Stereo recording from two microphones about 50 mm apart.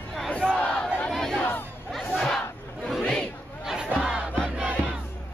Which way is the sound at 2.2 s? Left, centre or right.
Centre.